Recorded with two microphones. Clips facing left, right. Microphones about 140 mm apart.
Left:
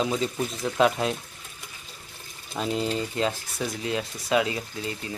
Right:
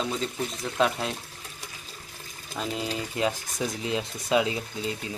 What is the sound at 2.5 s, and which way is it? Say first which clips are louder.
Speech: left 4 dB; centre (ahead or behind).